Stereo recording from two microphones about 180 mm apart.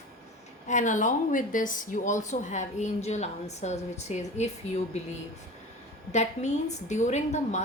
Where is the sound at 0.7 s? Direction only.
45° left (ahead or behind).